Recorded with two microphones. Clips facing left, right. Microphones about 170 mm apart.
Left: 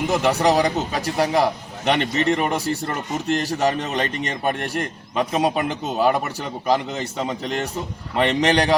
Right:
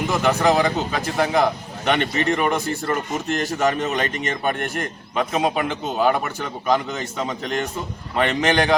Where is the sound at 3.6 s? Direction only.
35° left (ahead or behind).